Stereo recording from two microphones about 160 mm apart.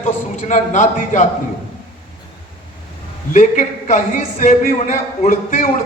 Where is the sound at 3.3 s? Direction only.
55° left (ahead or behind).